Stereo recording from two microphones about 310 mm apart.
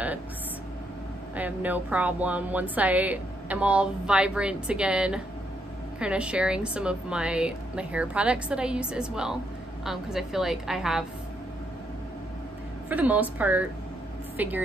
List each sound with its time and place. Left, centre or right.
1.3 s a woman's voice: centre
12.9 s a woman's voice: centre